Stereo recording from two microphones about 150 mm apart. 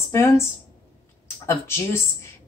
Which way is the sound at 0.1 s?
15° left (ahead or behind).